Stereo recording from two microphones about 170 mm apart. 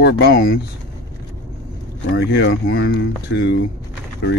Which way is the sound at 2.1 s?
75° left (ahead or behind).